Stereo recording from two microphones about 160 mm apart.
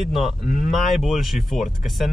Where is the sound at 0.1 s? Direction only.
Centre (ahead or behind).